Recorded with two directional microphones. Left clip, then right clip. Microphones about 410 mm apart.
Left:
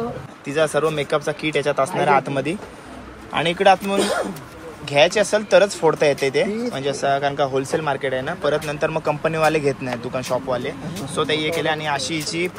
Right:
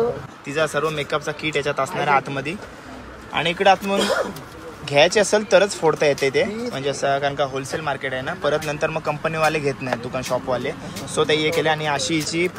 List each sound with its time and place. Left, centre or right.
0.5 s speech: centre